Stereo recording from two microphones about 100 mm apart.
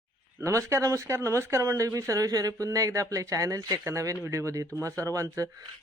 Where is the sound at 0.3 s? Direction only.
30° right (ahead or behind).